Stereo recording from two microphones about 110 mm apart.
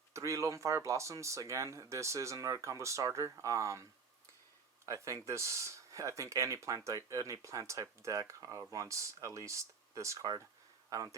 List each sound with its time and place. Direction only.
0.1 s speech: 30° right (ahead or behind)
4.9 s speech: 30° right (ahead or behind)